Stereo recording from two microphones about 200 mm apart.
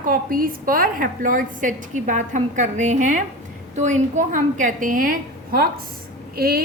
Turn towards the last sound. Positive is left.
turn(degrees=-50)  # may be behind; listen again after turning